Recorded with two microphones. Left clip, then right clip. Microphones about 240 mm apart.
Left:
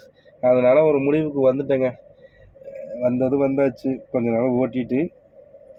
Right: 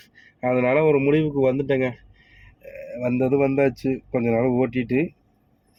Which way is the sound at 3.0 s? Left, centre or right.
Right.